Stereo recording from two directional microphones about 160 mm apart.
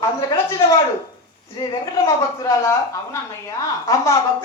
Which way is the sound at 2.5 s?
20° left (ahead or behind).